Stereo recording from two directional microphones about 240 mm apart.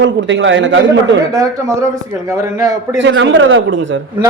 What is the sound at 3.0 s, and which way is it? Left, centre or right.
A woman's voice, right.